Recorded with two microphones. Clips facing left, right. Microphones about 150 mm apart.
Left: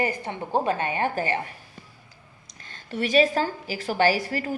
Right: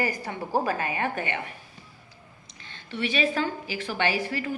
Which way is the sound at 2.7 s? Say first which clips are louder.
Left 4 dB; 40° left (ahead or behind).